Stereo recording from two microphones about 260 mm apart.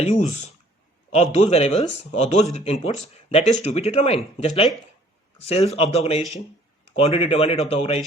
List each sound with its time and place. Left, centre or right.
0.0 s a man's voice: left